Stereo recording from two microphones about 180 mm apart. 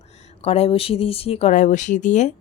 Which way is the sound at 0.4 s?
35° left (ahead or behind).